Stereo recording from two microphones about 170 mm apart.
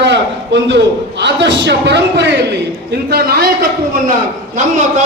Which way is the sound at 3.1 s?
65° right (ahead or behind).